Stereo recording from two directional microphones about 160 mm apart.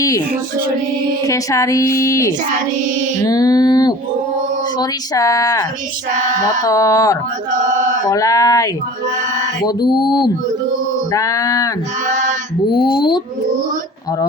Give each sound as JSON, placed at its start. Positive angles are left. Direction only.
{"t": 1.2, "sound": "speech", "side_deg": 20}
{"t": 3.2, "sound": "mantra", "side_deg": 20}
{"t": 4.8, "sound": "speech", "side_deg": 20}
{"t": 12.0, "sound": "a sound", "side_deg": -50}
{"t": 12.7, "sound": "speech", "side_deg": 30}